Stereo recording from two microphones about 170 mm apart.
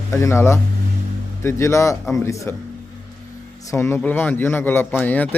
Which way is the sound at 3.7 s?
15° left (ahead or behind).